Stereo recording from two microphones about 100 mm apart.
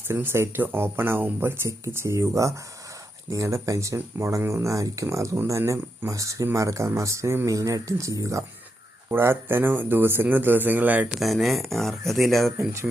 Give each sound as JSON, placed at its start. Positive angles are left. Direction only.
{"t": 0.1, "sound": "speech", "side_deg": -20}
{"t": 11.2, "sound": "speech", "side_deg": 0}